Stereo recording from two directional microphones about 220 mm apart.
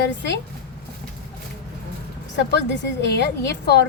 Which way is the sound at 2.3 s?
50° left (ahead or behind).